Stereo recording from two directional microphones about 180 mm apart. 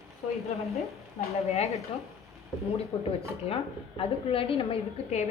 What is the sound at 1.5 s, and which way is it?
Speech, 35° left (ahead or behind).